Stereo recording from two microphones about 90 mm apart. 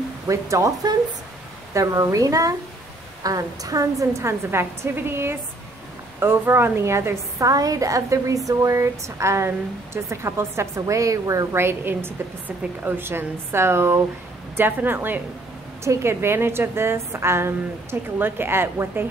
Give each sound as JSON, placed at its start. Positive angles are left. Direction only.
{"t": 0.3, "sound": "a woman's voice", "side_deg": -35}
{"t": 7.4, "sound": "a woman's voice", "side_deg": -40}